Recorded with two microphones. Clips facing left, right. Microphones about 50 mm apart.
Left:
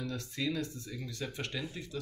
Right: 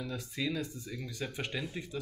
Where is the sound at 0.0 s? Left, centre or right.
Centre.